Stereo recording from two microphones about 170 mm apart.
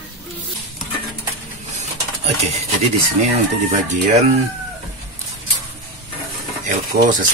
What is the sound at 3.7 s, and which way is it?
Speech, 45° right (ahead or behind).